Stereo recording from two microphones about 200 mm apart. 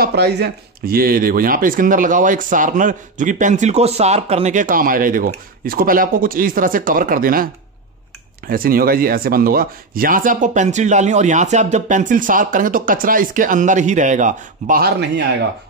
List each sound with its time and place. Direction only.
0.0 s speech: 55° right (ahead or behind)
8.5 s speech: 45° right (ahead or behind)